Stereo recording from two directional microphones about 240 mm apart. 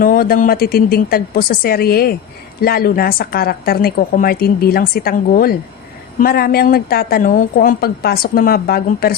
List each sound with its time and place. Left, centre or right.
0.0 s a woman's voice: left